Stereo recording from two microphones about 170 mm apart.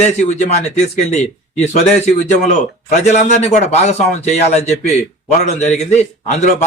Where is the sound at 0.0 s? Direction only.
40° left (ahead or behind).